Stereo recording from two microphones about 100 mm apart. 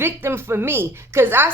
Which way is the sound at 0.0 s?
20° right (ahead or behind).